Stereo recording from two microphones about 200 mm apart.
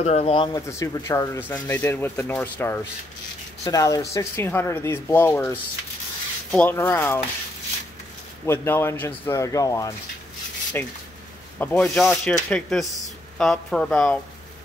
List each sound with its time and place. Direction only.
0.0 s speech: 30° left (ahead or behind)
0.6 s speech: 15° left (ahead or behind)
8.5 s speech: 10° left (ahead or behind)